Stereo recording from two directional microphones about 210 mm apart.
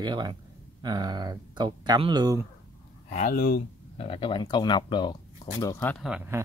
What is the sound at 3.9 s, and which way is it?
Speech, 25° left (ahead or behind).